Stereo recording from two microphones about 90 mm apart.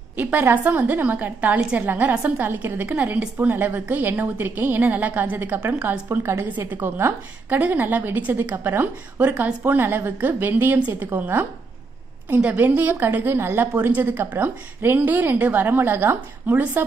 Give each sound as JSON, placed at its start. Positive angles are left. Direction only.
{"t": 0.2, "sound": "a woman's voice", "side_deg": -20}